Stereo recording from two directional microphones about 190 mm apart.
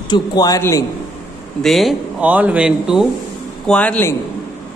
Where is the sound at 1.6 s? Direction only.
Centre (ahead or behind).